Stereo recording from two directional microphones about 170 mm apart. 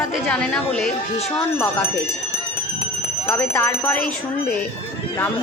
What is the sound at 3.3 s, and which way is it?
Speech, 10° left (ahead or behind).